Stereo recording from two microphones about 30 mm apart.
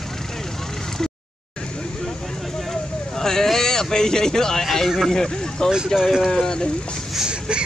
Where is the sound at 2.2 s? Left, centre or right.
Centre.